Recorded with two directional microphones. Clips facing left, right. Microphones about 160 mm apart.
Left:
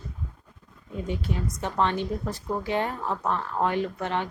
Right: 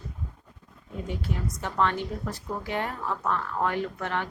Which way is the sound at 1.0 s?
20° left (ahead or behind).